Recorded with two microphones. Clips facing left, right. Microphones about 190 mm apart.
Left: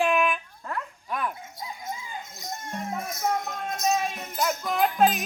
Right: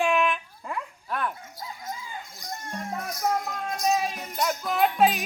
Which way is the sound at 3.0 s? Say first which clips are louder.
Right 2 dB; 25° left (ahead or behind).